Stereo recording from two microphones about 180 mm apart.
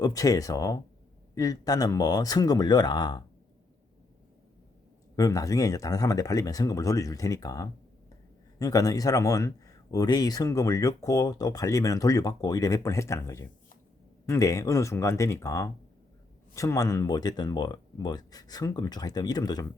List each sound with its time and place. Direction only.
0.0 s speech: 20° left (ahead or behind)
5.1 s speech: 20° left (ahead or behind)